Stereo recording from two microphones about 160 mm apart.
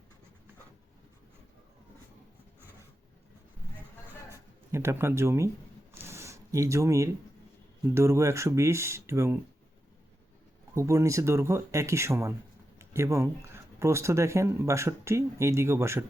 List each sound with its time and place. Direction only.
4.7 s speech: 15° right (ahead or behind)
5.9 s a sound: 15° right (ahead or behind)
7.9 s speech: 15° right (ahead or behind)
10.8 s speech: 20° right (ahead or behind)